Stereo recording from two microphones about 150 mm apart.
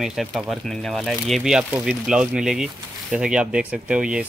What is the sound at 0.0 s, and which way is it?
Speech, centre (ahead or behind).